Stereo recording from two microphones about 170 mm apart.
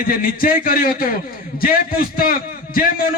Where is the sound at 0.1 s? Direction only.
55° left (ahead or behind).